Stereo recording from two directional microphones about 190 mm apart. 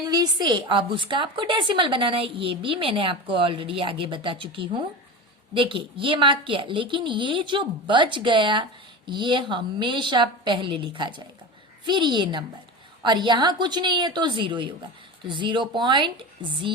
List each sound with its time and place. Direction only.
0.0 s a woman's voice: 20° right (ahead or behind)